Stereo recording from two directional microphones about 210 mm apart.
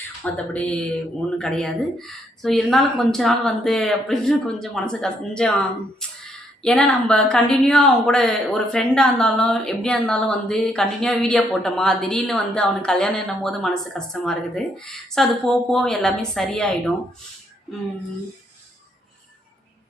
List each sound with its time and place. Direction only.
0.2 s a woman's voice: 5° left (ahead or behind)